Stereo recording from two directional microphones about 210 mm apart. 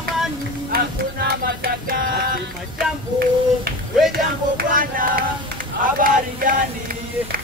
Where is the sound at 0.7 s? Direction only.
50° right (ahead or behind).